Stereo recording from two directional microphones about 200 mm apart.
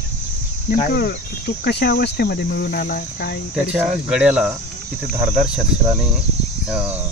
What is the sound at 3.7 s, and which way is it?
Speech, 5° right (ahead or behind).